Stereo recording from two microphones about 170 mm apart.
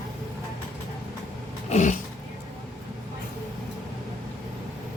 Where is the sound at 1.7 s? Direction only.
45° left (ahead or behind).